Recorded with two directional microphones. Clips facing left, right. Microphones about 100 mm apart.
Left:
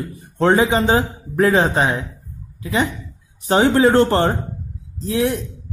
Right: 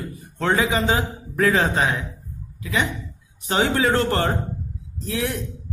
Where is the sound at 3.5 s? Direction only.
30° left (ahead or behind).